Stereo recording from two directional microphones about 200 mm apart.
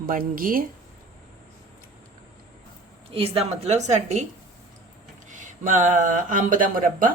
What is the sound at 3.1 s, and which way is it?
Speech, 30° right (ahead or behind).